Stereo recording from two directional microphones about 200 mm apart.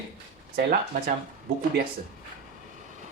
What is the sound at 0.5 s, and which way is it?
Speech, 45° right (ahead or behind).